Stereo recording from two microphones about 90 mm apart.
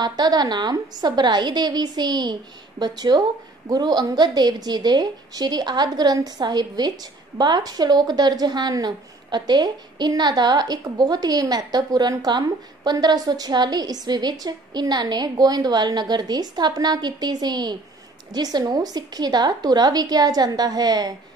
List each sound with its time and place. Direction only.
0.0 s a woman's voice: 50° right (ahead or behind)